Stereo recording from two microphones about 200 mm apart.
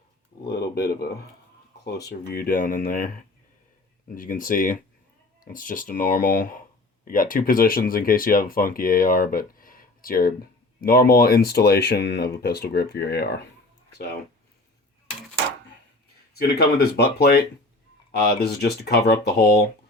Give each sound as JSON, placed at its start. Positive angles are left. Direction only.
{"t": 0.4, "sound": "a sound", "side_deg": 55}
{"t": 2.0, "sound": "speech", "side_deg": 50}
{"t": 16.3, "sound": "speech", "side_deg": 50}